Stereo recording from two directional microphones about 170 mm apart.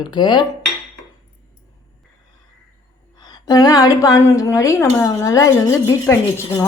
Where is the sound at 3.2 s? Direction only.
25° left (ahead or behind).